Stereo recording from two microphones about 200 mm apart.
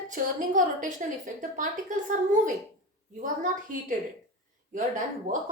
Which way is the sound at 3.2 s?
40° right (ahead or behind).